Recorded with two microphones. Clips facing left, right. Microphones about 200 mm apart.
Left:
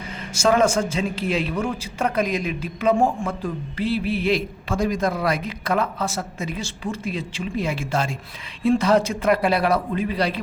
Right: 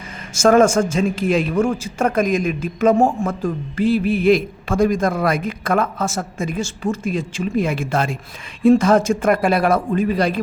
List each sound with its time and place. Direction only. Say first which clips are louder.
0.3 s a man's voice: right 5 dB; 45° right (ahead or behind)